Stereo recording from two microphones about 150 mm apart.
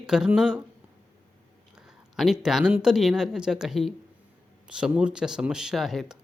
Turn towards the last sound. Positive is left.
turn(degrees=-5)  # may be behind; listen again after turning